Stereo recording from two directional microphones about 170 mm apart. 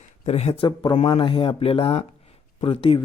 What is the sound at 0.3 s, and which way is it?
Speech, 40° left (ahead or behind).